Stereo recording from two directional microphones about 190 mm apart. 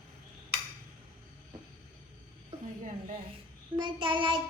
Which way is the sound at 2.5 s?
35° right (ahead or behind).